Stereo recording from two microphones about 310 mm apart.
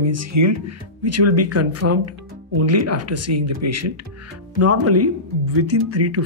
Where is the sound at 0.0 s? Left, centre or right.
Right.